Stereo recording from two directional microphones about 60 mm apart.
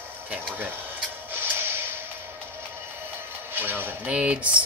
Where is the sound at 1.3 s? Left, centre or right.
Right.